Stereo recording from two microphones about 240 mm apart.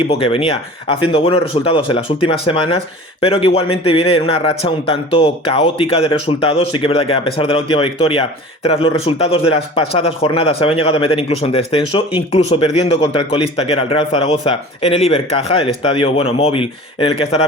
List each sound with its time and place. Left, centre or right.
0.1 s speech: left